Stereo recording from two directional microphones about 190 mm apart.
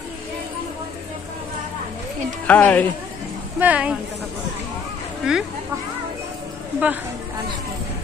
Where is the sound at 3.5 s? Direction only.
10° right (ahead or behind).